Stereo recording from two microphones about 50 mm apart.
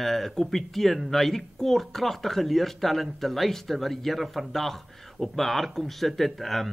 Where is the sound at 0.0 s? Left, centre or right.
Centre.